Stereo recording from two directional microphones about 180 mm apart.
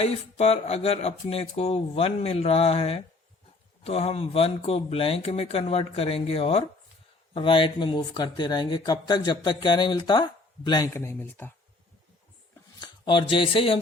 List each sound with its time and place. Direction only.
0.0 s speech: 35° left (ahead or behind); by 11.5 s 10° left (ahead or behind)
12.8 s speech: 25° left (ahead or behind)